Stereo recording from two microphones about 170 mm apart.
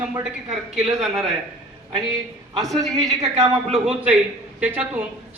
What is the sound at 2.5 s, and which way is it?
Speech, 20° right (ahead or behind).